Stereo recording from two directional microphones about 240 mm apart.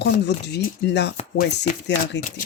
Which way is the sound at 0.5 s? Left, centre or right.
Left.